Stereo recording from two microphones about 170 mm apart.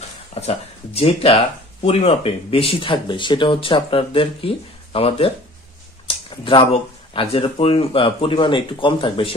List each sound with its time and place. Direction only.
0.3 s speech: 35° left (ahead or behind)